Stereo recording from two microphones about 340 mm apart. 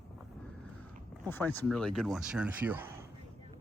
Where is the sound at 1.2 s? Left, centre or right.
Centre.